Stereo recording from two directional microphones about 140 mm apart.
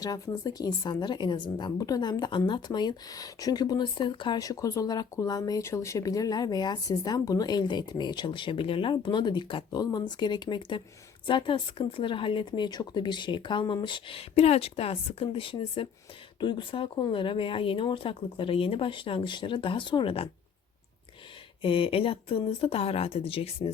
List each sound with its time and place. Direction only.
0.0 s speech: 25° left (ahead or behind)
21.6 s speech: 40° left (ahead or behind)